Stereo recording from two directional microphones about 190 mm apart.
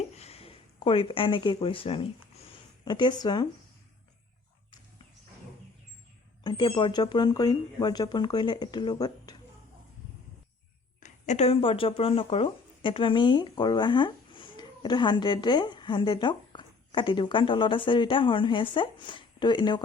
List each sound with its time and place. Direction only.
0.2 s a sound: 30° left (ahead or behind)
6.4 s speech: 25° left (ahead or behind)
11.0 s speech: 35° left (ahead or behind)